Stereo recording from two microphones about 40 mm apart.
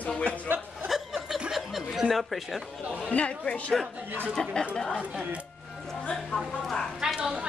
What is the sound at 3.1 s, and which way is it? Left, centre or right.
Speech, left.